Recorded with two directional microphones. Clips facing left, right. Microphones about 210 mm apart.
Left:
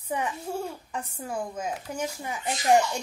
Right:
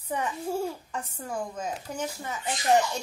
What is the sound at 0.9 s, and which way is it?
A woman's voice, 10° left (ahead or behind).